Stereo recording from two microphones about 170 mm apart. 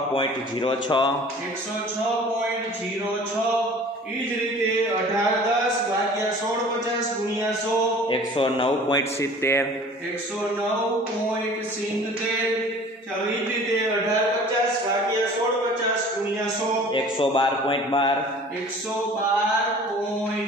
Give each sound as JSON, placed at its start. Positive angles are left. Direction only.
{"t": 0.1, "sound": "speech", "side_deg": 30}
{"t": 8.1, "sound": "speech", "side_deg": 30}
{"t": 9.2, "sound": "a man's voice", "side_deg": 15}
{"t": 16.9, "sound": "speech", "side_deg": 30}